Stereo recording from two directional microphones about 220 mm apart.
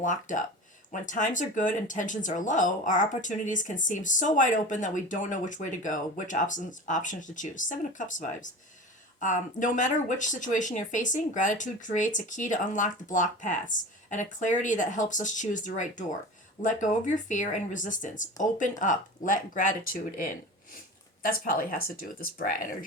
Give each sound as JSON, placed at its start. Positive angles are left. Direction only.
{"t": 0.0, "sound": "speech", "side_deg": 35}